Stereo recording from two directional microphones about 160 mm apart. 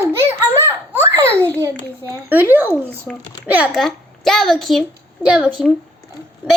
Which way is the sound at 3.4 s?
10° right (ahead or behind).